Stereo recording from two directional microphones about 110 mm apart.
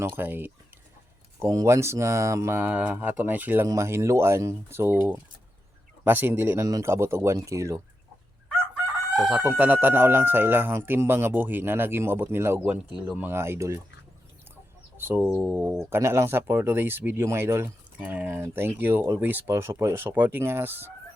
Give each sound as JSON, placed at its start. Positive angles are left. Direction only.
{"t": 0.0, "sound": "speech", "side_deg": -20}
{"t": 1.4, "sound": "speech", "side_deg": -25}
{"t": 9.1, "sound": "chicken", "side_deg": -5}
{"t": 9.5, "sound": "speech", "side_deg": -15}
{"t": 14.9, "sound": "speech", "side_deg": -20}